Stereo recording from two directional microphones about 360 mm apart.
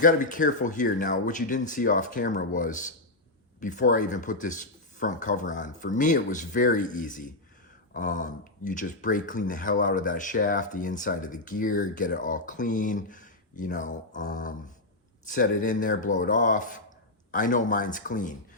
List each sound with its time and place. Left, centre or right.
0.0 s speech: left